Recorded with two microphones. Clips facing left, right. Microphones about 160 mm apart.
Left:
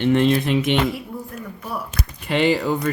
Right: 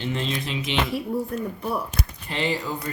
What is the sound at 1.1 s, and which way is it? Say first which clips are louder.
Speech: right 6 dB; 35° right (ahead or behind).